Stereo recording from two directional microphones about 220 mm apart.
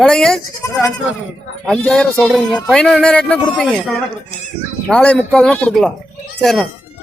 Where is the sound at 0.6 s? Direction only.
15° left (ahead or behind).